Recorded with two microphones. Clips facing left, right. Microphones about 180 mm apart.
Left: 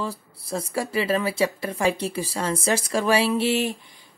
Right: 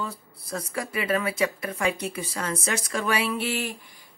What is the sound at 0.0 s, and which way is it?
Speech, 30° left (ahead or behind).